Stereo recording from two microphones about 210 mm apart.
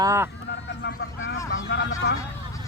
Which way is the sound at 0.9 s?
60° left (ahead or behind).